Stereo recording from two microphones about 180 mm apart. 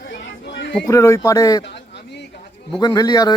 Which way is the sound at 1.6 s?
70° left (ahead or behind).